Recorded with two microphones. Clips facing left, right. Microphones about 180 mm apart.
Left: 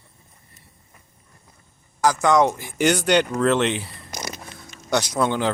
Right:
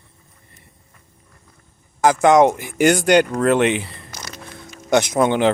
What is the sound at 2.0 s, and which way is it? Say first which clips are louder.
Speech: right 5 dB; 55° right (ahead or behind).